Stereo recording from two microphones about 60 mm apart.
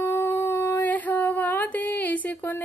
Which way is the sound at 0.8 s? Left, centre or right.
Left.